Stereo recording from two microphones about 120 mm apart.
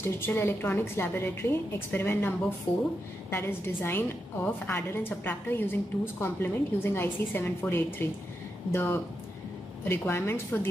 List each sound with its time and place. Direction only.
0.0 s a woman's voice: 20° left (ahead or behind)